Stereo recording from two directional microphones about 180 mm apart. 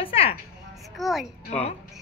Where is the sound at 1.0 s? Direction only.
Centre (ahead or behind).